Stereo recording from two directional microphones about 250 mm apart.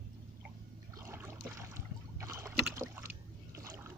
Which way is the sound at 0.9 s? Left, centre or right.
Centre.